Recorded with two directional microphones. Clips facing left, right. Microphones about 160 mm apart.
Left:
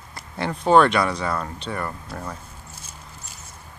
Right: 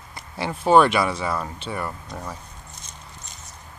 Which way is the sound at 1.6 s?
5° right (ahead or behind).